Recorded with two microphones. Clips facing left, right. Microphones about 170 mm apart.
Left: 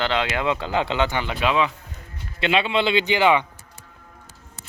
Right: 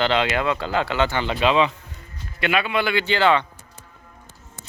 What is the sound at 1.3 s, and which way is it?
Speech, 25° right (ahead or behind).